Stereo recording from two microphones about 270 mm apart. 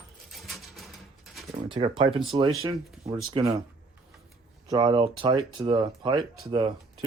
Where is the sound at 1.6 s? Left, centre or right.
Centre.